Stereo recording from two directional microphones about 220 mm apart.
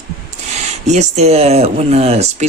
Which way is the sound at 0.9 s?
30° right (ahead or behind).